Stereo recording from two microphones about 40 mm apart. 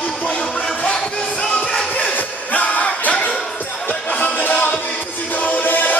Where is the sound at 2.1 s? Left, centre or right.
Left.